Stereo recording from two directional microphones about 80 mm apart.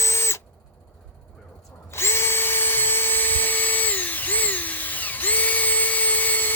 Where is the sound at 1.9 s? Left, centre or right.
Left.